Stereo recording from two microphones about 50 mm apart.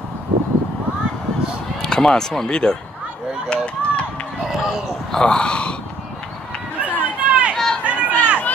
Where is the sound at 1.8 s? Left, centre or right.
Centre.